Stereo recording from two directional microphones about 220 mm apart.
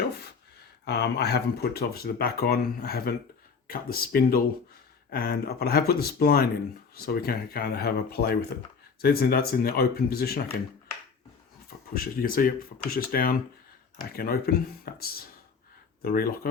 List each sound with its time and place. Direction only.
0.9 s speech: 50° left (ahead or behind)
11.9 s speech: 40° left (ahead or behind)
16.0 s speech: 45° left (ahead or behind)